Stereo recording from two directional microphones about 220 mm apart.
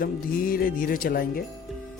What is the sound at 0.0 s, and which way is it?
Speech, 40° left (ahead or behind).